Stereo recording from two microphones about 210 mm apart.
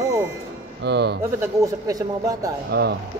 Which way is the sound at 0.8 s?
55° right (ahead or behind).